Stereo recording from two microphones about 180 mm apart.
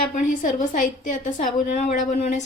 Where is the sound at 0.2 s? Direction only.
45° left (ahead or behind).